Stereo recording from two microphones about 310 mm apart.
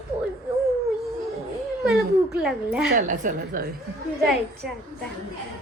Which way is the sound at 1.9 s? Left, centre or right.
Centre.